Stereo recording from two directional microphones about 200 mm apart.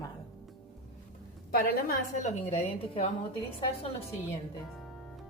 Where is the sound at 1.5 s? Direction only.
50° left (ahead or behind).